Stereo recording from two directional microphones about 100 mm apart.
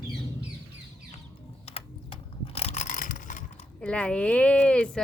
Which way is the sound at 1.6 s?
75° left (ahead or behind).